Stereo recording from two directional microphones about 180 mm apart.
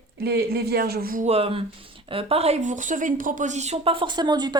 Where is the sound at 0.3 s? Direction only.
60° right (ahead or behind).